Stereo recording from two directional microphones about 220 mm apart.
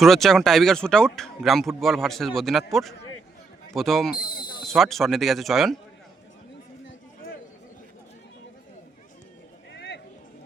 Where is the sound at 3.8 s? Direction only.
Centre (ahead or behind).